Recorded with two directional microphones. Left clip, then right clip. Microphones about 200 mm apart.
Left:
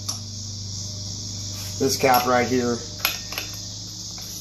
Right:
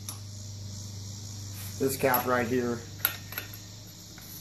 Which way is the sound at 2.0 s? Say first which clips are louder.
Left 8 dB; 20° right (ahead or behind).